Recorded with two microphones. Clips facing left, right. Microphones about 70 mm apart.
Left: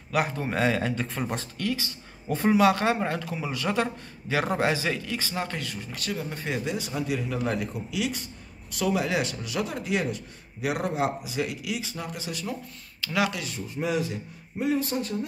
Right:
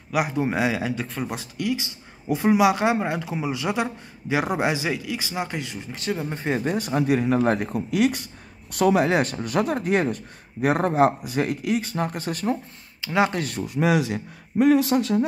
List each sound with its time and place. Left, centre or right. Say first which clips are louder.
0.1 s speech: right 3 dB; centre; by 12.5 s right
13.0 s speech: right 5 dB; right
13.3 s speech: right 7 dB; right
13.7 s a man's voice: right 6 dB; right